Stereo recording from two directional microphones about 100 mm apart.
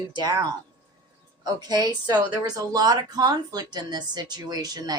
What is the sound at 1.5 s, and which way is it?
Speech, 40° right (ahead or behind).